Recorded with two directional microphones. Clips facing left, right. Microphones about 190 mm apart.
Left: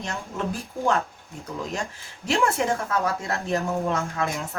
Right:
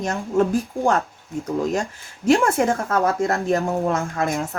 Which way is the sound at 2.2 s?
50° right (ahead or behind).